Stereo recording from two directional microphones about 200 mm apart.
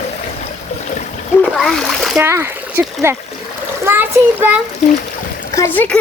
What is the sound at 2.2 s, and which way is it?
A child's voice, 10° right (ahead or behind).